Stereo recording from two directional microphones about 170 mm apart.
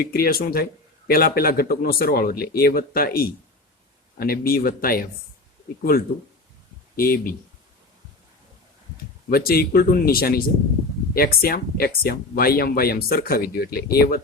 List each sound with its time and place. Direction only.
0.0 s speech: 60° left (ahead or behind)
6.9 s speech: 60° left (ahead or behind)
9.3 s speech: 60° left (ahead or behind)